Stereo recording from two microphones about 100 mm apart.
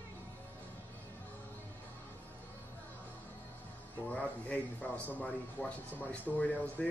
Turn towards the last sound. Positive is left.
turn(degrees=15)  # may be behind; listen again after turning